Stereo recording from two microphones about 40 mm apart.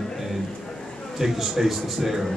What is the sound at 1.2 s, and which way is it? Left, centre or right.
Speech, centre.